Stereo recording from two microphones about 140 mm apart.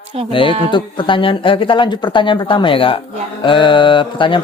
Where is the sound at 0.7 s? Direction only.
35° left (ahead or behind).